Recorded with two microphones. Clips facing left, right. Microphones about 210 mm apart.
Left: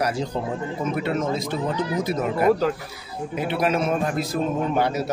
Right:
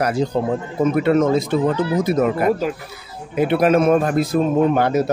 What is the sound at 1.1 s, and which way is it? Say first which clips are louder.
Speech: right 11 dB; 65° right (ahead or behind).